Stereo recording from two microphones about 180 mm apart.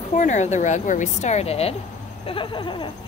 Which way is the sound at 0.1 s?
45° left (ahead or behind).